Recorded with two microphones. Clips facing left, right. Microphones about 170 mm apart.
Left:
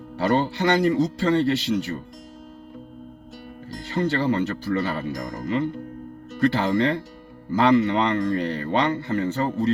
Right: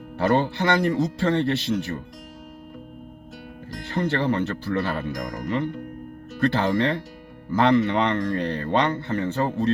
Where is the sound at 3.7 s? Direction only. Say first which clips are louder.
Left 1 dB; 60° right (ahead or behind).